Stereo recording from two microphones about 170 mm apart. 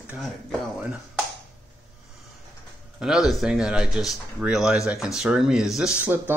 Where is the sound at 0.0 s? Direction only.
10° right (ahead or behind).